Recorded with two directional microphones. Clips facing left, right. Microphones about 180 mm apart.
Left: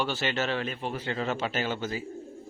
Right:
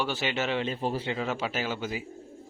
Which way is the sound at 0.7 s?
35° right (ahead or behind).